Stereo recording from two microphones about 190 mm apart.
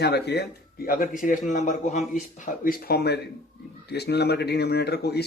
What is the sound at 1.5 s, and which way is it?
Speech, 40° left (ahead or behind).